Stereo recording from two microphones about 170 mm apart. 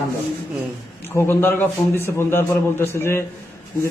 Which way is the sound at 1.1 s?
15° left (ahead or behind).